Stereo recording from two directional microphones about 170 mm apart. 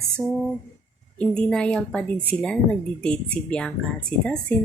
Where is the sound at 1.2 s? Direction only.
5° left (ahead or behind).